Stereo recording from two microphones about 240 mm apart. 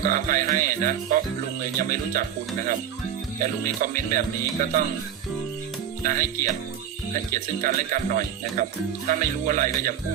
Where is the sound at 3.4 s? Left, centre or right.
Right.